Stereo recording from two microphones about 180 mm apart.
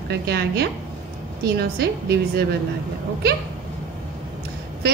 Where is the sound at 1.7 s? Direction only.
60° right (ahead or behind).